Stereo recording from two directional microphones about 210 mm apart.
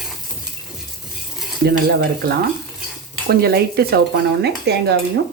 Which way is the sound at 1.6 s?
50° right (ahead or behind).